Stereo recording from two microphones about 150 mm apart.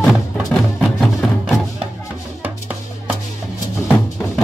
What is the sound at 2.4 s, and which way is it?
Music, 10° right (ahead or behind).